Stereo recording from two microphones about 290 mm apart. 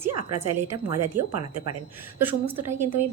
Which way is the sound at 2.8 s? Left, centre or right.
Right.